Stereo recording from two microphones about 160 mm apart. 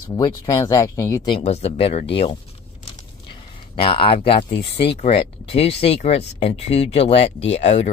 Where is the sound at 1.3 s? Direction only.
40° left (ahead or behind).